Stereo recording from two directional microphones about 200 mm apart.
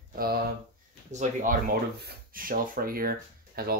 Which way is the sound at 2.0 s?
50° right (ahead or behind).